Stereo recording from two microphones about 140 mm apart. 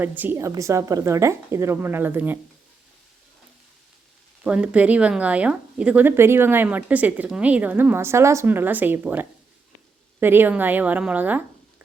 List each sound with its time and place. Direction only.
0.0 s a woman's voice: 15° right (ahead or behind)
4.4 s speech: 10° right (ahead or behind)